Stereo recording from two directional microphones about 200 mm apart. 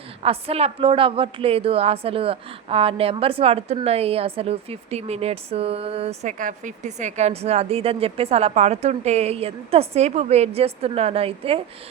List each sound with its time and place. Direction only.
0.2 s a woman's voice: 30° right (ahead or behind)